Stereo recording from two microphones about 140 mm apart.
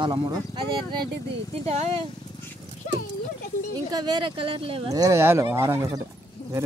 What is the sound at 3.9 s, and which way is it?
Speech, 30° right (ahead or behind).